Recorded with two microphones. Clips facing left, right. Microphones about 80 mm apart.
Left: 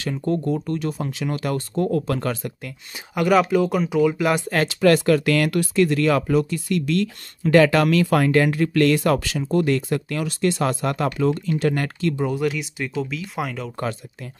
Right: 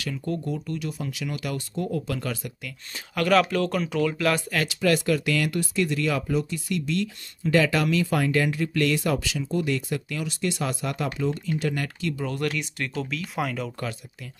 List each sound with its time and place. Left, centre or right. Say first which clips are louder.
0.0 s speech: left 6 dB; left
3.2 s speech: left 4 dB; centre
4.5 s speech: left 6 dB; left
8.3 s speech: left 6 dB; left
12.4 s speech: left 4 dB; centre